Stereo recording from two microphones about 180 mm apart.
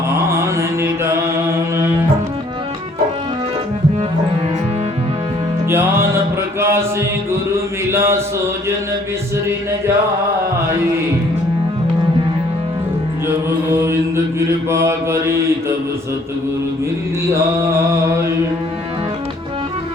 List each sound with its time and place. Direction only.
0.3 s mantra: 15° right (ahead or behind)
5.6 s music: 15° right (ahead or behind)
6.6 s chant: 15° right (ahead or behind)
7.5 s mantra: 15° right (ahead or behind)
13.2 s music: 15° right (ahead or behind)
14.3 s mantra: 15° right (ahead or behind)
18.0 s mantra: 15° right (ahead or behind)